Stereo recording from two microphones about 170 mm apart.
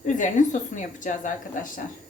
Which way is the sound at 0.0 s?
45° left (ahead or behind).